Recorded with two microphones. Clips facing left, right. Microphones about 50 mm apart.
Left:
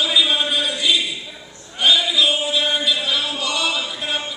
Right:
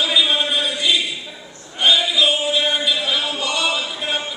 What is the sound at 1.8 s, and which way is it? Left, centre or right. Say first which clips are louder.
Music: right 1 dB; centre.